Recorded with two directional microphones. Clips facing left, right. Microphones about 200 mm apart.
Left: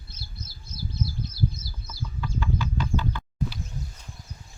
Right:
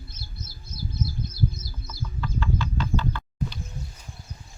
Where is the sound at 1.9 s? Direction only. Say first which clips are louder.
Right 1 dB; 10° left (ahead or behind).